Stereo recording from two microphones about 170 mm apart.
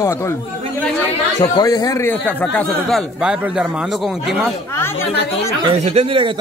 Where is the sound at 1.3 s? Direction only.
20° left (ahead or behind).